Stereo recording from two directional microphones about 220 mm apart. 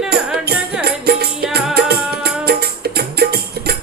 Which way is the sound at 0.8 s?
45° right (ahead or behind).